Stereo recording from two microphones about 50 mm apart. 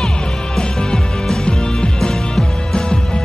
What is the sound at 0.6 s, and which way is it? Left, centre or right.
Music, centre.